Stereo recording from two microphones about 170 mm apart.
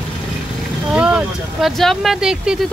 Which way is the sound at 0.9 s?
5° right (ahead or behind).